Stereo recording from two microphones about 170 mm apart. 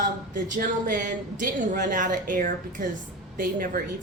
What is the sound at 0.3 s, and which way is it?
Speech, 50° right (ahead or behind).